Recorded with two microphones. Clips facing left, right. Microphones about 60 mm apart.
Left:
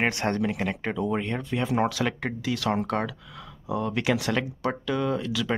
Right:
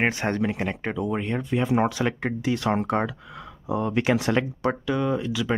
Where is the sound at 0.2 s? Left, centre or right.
Centre.